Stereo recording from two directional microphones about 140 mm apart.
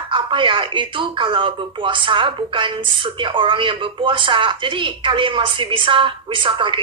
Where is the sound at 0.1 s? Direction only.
35° right (ahead or behind).